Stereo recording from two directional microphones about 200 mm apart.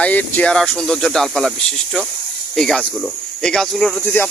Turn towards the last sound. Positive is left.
turn(degrees=5)  # may be behind; listen again after turning